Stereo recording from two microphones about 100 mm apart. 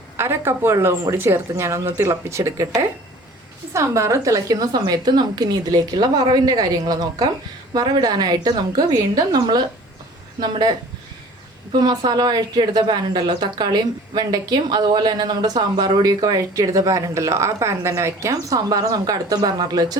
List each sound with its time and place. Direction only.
0.2 s a woman's voice: 25° right (ahead or behind); by 20.0 s 40° right (ahead or behind)